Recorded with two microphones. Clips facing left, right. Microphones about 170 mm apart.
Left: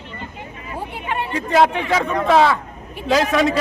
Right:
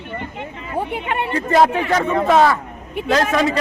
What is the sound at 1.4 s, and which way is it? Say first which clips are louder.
A man's voice: right 1 dB; centre (ahead or behind).